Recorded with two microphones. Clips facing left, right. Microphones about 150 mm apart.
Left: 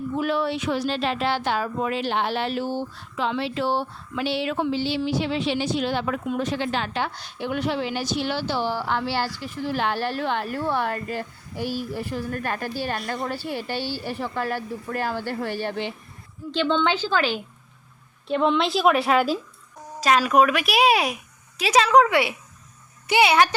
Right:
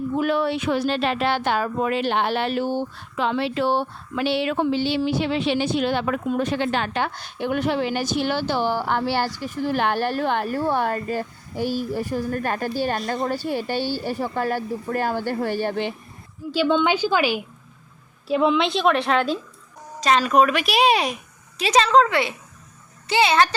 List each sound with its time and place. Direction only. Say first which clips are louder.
0.2 s a woman's voice: right 2 dB; 55° right (ahead or behind)
13.0 s a woman's voice: right 4 dB; 35° right (ahead or behind); by 15.9 s 50° right (ahead or behind)
16.5 s a woman's voice: right 3 dB; 10° right (ahead or behind); by 23.6 s 10° left (ahead or behind)